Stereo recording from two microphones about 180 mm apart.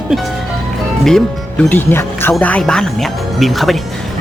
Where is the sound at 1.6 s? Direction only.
10° left (ahead or behind).